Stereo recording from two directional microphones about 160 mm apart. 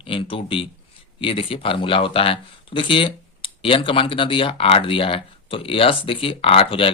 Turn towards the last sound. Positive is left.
turn(degrees=35)  # may be behind; listen again after turning